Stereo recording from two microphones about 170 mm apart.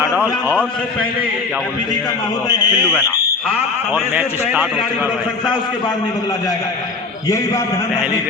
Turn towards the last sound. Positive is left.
turn(degrees=20)  # may be behind; listen again after turning